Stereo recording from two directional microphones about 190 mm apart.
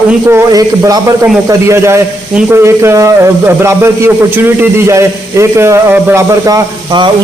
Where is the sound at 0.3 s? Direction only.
15° right (ahead or behind).